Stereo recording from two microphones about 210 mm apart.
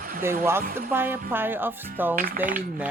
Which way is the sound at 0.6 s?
40° right (ahead or behind).